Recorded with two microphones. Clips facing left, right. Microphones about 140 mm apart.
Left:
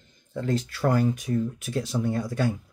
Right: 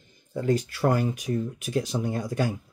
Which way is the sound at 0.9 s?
10° right (ahead or behind).